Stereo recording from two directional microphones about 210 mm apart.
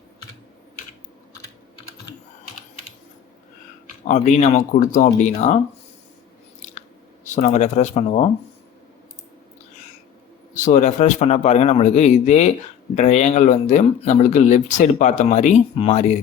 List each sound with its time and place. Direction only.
4.0 s speech: 35° left (ahead or behind)
7.3 s speech: 35° left (ahead or behind)
10.5 s speech: 35° left (ahead or behind)